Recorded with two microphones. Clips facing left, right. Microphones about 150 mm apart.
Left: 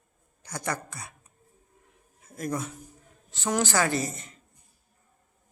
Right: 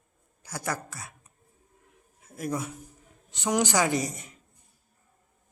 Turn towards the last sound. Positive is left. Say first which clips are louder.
# right 1 dB
turn(degrees=-10)  # may be behind; listen again after turning